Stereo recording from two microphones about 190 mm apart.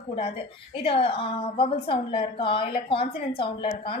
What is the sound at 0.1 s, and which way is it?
A woman's voice, 30° left (ahead or behind).